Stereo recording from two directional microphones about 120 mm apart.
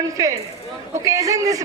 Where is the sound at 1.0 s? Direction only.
30° right (ahead or behind).